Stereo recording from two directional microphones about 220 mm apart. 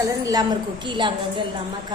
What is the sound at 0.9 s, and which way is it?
Speech, 20° right (ahead or behind).